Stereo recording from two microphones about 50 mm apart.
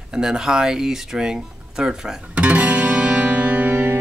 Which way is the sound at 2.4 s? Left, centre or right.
Right.